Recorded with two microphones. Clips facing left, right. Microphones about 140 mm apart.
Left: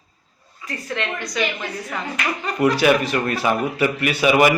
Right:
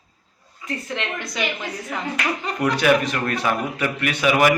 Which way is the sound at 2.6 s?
5° left (ahead or behind).